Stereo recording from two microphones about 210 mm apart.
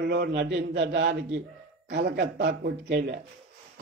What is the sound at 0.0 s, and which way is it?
A man's voice, 50° right (ahead or behind).